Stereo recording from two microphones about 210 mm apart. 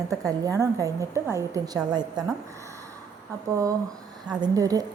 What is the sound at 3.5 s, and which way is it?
A woman's voice, 15° right (ahead or behind).